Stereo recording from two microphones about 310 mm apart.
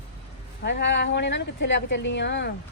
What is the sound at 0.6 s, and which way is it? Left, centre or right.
A woman's voice, left.